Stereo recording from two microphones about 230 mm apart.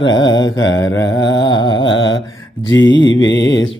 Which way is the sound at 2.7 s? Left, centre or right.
Left.